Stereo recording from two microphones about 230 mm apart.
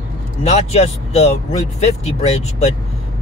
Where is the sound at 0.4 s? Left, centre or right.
Left.